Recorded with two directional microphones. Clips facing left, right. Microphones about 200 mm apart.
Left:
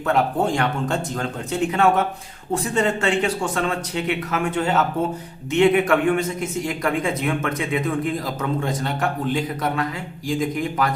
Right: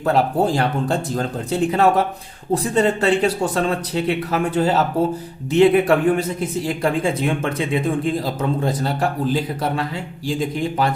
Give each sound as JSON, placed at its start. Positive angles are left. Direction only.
{"t": 0.0, "sound": "a man's voice", "side_deg": -35}